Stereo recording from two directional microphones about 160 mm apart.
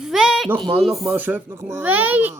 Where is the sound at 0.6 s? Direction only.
Centre (ahead or behind).